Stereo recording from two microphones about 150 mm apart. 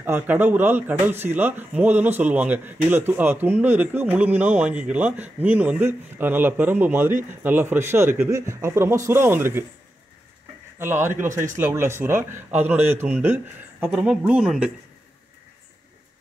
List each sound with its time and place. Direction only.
0.0 s speech: 15° right (ahead or behind)
10.8 s speech: 15° right (ahead or behind)